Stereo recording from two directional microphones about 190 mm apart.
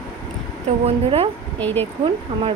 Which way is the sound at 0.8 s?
30° right (ahead or behind).